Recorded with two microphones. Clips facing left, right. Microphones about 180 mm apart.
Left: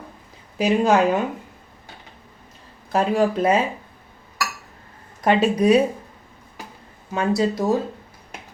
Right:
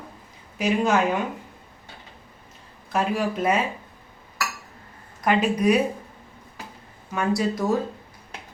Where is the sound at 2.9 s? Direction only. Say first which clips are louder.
Left 5 dB; 35° left (ahead or behind).